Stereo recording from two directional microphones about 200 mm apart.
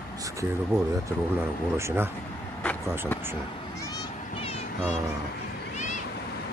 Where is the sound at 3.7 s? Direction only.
20° left (ahead or behind).